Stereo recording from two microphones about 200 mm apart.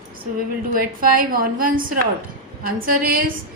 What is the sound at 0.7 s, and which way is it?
A woman's voice, 45° right (ahead or behind).